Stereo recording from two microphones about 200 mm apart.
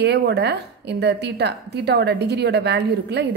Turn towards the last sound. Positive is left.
turn(degrees=-55)  # may be behind; listen again after turning